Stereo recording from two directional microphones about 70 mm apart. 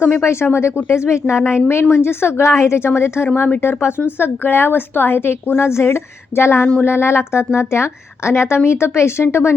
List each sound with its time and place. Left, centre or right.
0.0 s speech: left